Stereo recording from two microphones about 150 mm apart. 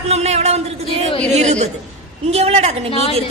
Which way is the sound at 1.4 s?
50° right (ahead or behind).